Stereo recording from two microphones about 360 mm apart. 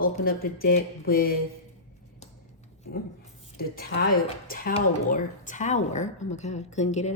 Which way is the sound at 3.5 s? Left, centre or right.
Left.